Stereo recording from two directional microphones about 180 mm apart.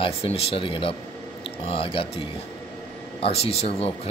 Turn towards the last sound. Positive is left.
turn(degrees=35)  # may be behind; listen again after turning